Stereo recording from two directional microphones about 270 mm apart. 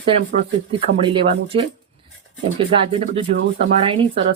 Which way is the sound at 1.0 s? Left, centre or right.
Centre.